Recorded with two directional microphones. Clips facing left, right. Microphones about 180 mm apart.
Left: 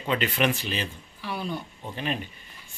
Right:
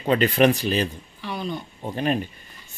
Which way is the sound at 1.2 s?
5° left (ahead or behind).